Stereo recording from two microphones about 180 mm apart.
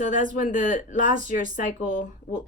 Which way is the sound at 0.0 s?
45° left (ahead or behind).